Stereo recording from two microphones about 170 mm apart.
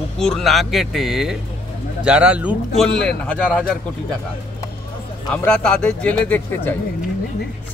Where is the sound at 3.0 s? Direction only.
5° left (ahead or behind).